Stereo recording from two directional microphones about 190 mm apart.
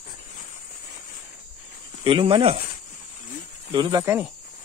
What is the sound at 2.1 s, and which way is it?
Speech, 25° right (ahead or behind).